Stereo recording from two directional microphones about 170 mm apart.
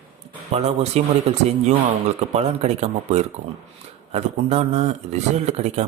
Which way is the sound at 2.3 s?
40° right (ahead or behind).